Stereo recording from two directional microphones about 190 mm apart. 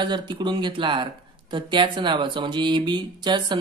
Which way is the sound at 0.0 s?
25° right (ahead or behind).